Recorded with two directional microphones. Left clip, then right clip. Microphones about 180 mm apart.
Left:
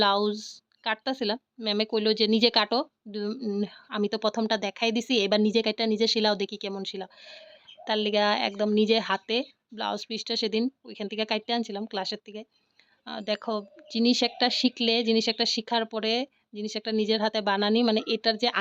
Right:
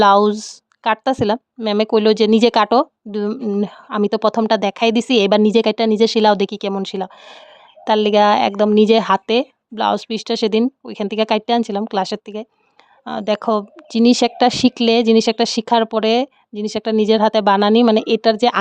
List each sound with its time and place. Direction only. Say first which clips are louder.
0.0 s a woman's voice: right 12 dB; 30° right (ahead or behind)